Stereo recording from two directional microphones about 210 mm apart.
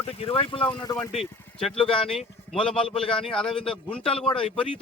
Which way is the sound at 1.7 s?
25° left (ahead or behind).